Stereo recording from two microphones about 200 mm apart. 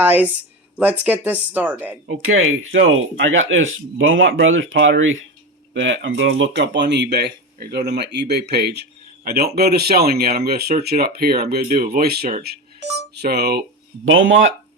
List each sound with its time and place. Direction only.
0.0 s speech: 10° right (ahead or behind)
2.0 s speech: 90° right; by 13.7 s 55° right (ahead or behind)
14.0 s speech: 75° right (ahead or behind)